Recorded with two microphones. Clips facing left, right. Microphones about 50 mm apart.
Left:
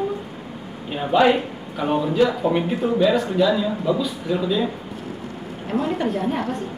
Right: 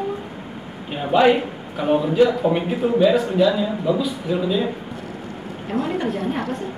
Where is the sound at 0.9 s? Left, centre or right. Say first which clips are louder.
Right 1 dB; centre.